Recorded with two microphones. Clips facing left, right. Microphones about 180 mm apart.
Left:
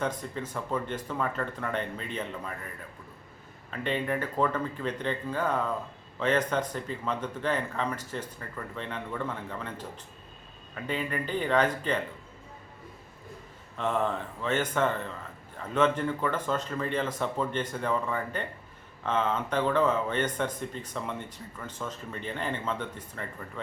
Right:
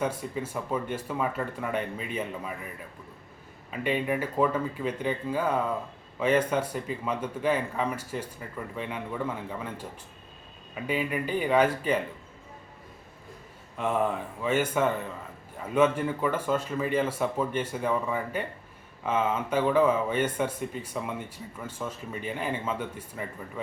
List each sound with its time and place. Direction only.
0.0 s speech: 10° right (ahead or behind)
3.7 s speech: 10° right (ahead or behind)
13.7 s speech: 10° right (ahead or behind)